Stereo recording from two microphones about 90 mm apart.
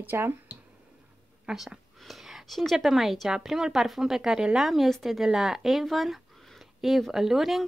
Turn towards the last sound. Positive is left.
turn(degrees=0)  # may be behind; listen again after turning